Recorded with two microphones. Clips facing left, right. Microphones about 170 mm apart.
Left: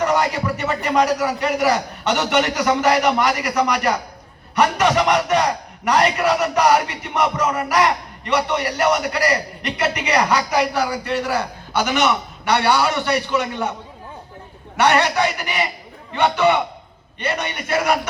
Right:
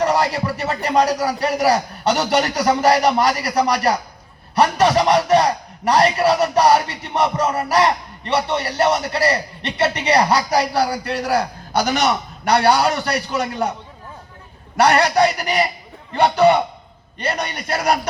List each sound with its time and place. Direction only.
0.0 s a man's voice: 30° right (ahead or behind)
14.8 s a man's voice: 35° right (ahead or behind)